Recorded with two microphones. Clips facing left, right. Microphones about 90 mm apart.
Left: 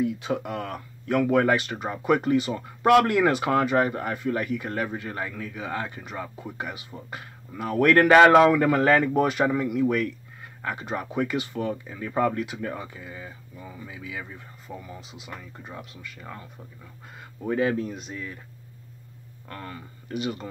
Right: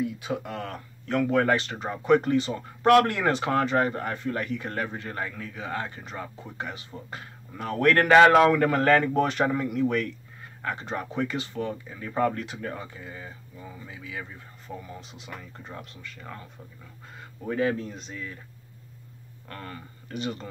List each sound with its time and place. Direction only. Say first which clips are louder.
0.4 s speech: left 3 dB; 15° left (ahead or behind)
19.5 s speech: left 1 dB; 20° left (ahead or behind)